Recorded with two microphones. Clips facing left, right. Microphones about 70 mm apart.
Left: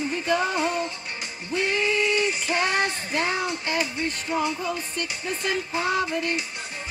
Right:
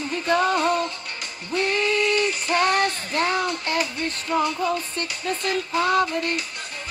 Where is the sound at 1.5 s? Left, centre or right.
Centre.